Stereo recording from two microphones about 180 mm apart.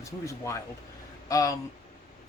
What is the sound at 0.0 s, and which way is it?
A man's voice, 15° left (ahead or behind).